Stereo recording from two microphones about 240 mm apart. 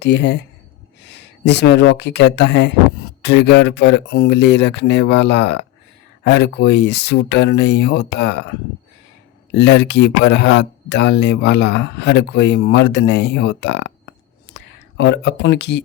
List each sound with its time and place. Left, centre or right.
0.0 s speech: left